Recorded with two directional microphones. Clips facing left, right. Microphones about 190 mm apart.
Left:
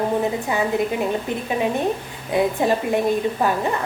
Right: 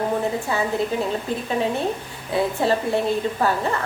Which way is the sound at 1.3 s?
20° left (ahead or behind).